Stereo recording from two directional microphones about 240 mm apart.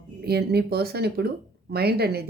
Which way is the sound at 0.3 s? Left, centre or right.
Right.